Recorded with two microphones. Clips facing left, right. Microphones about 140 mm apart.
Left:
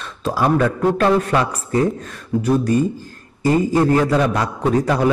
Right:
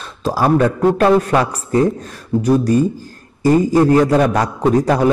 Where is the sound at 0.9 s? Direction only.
40° right (ahead or behind).